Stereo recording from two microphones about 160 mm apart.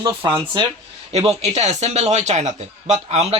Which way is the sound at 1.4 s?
45° right (ahead or behind).